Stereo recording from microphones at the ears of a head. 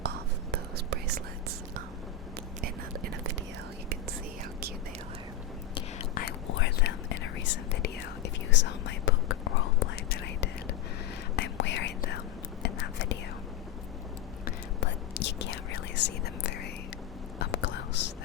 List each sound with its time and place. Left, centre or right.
0.0 s whispering: right
2.6 s whispering: right
5.7 s whispering: left
14.4 s whispering: left